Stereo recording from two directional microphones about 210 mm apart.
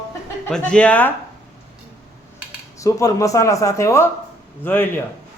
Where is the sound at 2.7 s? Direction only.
15° left (ahead or behind).